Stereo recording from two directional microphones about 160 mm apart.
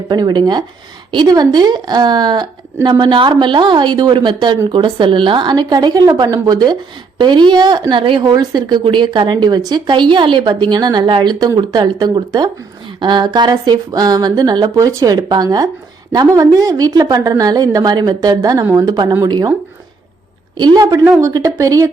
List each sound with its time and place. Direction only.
0.1 s a woman's voice: 25° right (ahead or behind)
20.6 s a woman's voice: 25° right (ahead or behind)